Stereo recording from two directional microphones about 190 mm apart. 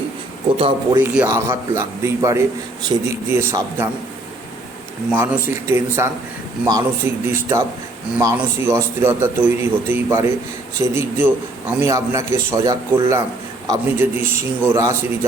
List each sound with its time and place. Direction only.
0.9 s a man's voice: 10° right (ahead or behind)
5.1 s a man's voice: 15° right (ahead or behind)